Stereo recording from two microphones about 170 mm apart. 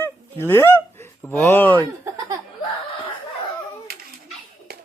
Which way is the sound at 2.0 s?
20° right (ahead or behind).